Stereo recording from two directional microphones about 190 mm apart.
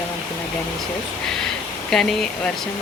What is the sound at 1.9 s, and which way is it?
Speech, centre (ahead or behind).